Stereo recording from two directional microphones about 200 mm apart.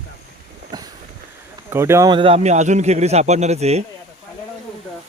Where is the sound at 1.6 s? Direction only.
10° right (ahead or behind); by 3.8 s 30° right (ahead or behind).